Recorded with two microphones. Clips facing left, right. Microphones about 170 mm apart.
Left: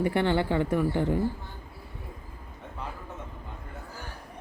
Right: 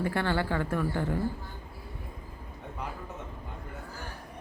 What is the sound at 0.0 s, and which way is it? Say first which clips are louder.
Speech: left 4 dB; 20° left (ahead or behind).